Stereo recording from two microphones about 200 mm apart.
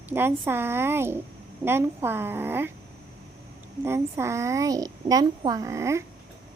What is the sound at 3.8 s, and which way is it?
A child's voice, 10° right (ahead or behind).